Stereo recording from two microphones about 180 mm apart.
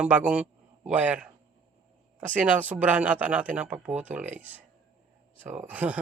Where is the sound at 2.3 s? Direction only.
10° right (ahead or behind).